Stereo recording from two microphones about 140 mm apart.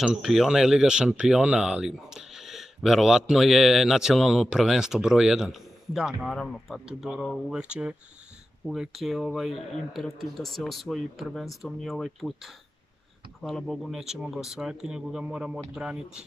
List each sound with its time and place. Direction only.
0.0 s speech: 5° right (ahead or behind)